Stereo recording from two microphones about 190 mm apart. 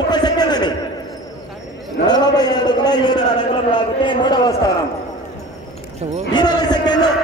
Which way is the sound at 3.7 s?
25° left (ahead or behind).